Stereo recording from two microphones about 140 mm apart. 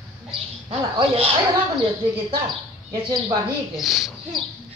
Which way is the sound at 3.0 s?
30° right (ahead or behind).